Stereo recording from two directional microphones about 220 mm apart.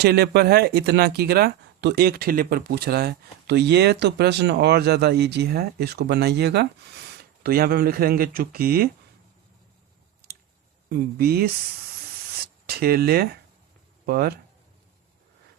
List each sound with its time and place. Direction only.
0.0 s speech: 45° right (ahead or behind)
10.8 s speech: 45° right (ahead or behind)
12.6 s speech: 45° right (ahead or behind)